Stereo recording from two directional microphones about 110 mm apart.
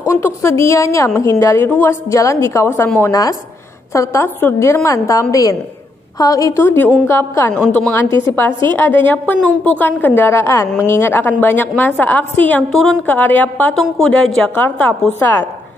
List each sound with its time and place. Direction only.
0.1 s a woman's voice: 25° left (ahead or behind)
2.0 s a woman's voice: 30° left (ahead or behind)
6.6 s a woman's voice: 20° left (ahead or behind)
8.1 s a woman's voice: 25° left (ahead or behind)
13.7 s a woman's voice: 5° left (ahead or behind)